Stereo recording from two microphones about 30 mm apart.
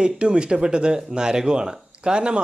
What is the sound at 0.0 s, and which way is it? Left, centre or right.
Speech, right.